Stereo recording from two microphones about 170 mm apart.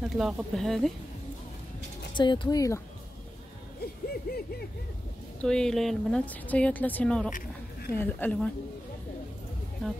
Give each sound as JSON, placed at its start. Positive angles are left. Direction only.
{"t": 0.0, "sound": "speech", "side_deg": -5}
{"t": 2.1, "sound": "speech", "side_deg": 25}
{"t": 3.8, "sound": "a sound", "side_deg": 65}
{"t": 5.4, "sound": "a woman's voice", "side_deg": 5}
{"t": 7.3, "sound": "a sound", "side_deg": 60}
{"t": 8.0, "sound": "a woman's voice", "side_deg": 10}